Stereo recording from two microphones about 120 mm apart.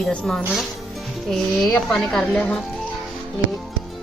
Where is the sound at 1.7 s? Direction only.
5° left (ahead or behind).